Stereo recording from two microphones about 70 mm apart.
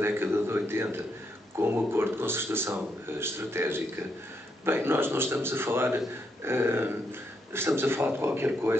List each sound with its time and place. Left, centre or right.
0.0 s speech: right